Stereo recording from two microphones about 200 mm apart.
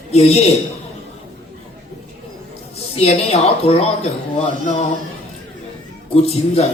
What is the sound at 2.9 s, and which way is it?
Speech, 30° left (ahead or behind).